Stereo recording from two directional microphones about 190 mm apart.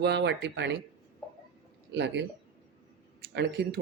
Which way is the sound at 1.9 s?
65° right (ahead or behind).